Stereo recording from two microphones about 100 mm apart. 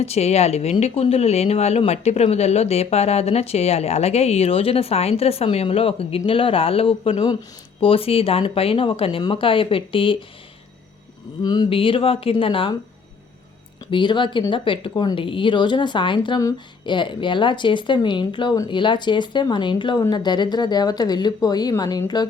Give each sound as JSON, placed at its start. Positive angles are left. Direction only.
{"t": 0.0, "sound": "speech", "side_deg": 90}
{"t": 11.4, "sound": "speech", "side_deg": 45}
{"t": 11.7, "sound": "speech", "side_deg": 60}
{"t": 13.9, "sound": "speech", "side_deg": 50}